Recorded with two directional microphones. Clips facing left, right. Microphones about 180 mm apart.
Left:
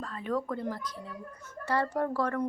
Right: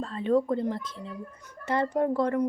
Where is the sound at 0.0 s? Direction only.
25° right (ahead or behind).